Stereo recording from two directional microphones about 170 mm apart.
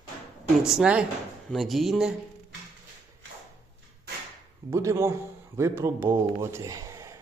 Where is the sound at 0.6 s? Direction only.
5° right (ahead or behind).